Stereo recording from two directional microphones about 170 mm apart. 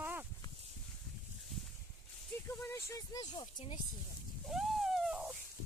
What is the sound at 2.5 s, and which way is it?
Speech, 15° left (ahead or behind).